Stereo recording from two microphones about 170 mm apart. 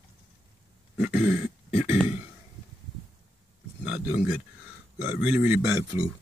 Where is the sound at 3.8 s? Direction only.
5° right (ahead or behind).